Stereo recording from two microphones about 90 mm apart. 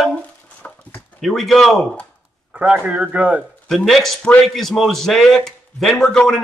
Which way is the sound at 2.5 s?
15° right (ahead or behind).